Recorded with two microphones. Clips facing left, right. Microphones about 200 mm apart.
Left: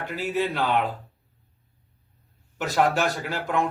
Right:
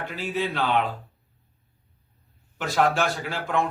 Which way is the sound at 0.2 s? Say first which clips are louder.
Left 2 dB; 15° left (ahead or behind).